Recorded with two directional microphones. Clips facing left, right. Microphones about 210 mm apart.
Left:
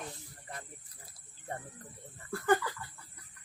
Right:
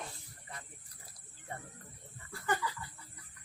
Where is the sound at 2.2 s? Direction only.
50° left (ahead or behind).